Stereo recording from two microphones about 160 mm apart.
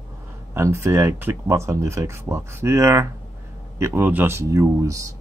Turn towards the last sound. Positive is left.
turn(degrees=-20)  # may be behind; listen again after turning